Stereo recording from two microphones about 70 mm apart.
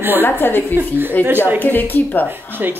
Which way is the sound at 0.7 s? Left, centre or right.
Right.